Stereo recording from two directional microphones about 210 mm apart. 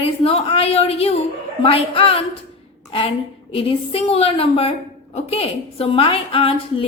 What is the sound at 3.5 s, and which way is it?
A woman's voice, 25° left (ahead or behind).